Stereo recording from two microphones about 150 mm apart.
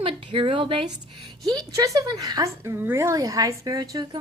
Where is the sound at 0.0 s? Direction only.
35° right (ahead or behind).